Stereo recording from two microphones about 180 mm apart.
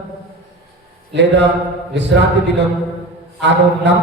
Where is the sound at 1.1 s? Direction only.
75° right (ahead or behind).